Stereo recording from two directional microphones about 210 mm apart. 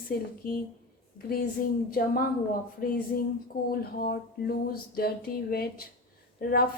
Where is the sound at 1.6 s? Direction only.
40° left (ahead or behind).